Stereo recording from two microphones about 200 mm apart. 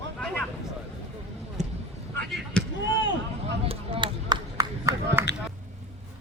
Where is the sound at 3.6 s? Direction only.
30° right (ahead or behind).